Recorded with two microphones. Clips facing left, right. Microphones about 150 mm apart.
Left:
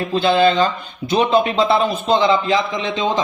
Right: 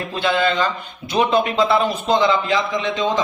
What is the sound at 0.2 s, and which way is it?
A man's voice, 30° left (ahead or behind).